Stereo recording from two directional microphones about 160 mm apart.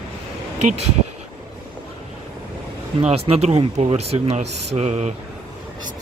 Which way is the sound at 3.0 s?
40° right (ahead or behind).